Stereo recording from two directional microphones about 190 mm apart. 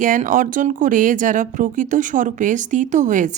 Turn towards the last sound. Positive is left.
turn(degrees=-40)  # may be behind; listen again after turning